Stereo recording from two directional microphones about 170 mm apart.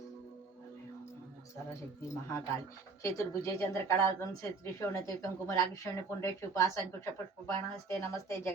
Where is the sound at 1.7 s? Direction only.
15° left (ahead or behind).